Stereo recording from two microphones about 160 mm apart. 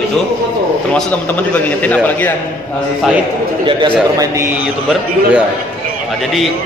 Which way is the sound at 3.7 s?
30° right (ahead or behind).